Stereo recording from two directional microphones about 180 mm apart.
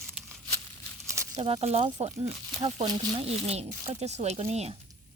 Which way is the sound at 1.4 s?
35° right (ahead or behind).